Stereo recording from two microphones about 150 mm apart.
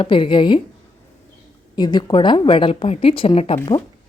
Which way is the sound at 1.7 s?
30° left (ahead or behind).